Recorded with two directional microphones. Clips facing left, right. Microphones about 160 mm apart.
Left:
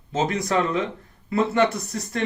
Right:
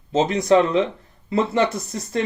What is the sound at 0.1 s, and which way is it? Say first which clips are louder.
Speech: right 6 dB; 25° right (ahead or behind).